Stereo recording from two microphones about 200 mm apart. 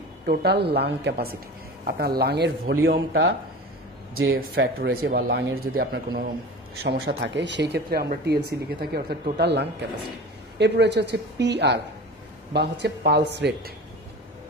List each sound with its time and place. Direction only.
0.3 s speech: 55° right (ahead or behind)
5.7 s speech: 65° right (ahead or behind)